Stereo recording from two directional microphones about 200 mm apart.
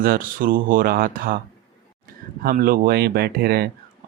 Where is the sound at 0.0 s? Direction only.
45° right (ahead or behind).